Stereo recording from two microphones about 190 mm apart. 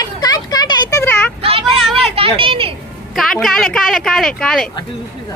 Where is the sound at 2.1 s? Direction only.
30° right (ahead or behind).